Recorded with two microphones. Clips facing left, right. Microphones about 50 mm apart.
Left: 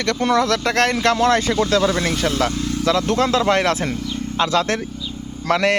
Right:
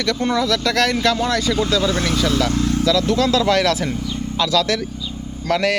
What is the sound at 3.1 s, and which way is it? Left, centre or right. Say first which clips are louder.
Speech: even; left.